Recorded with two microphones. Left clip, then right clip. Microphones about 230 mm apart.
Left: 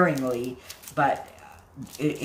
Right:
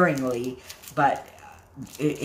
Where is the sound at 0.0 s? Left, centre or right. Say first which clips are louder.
Right 1 dB; centre.